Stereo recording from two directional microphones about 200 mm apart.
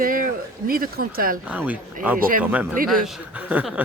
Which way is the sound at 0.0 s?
45° right (ahead or behind).